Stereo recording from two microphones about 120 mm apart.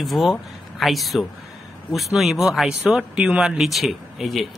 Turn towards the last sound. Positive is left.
turn(degrees=0)  # may be behind; listen again after turning